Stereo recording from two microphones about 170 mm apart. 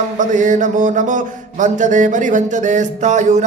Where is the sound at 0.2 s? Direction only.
45° right (ahead or behind).